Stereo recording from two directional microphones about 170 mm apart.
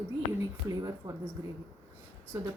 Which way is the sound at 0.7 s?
20° right (ahead or behind).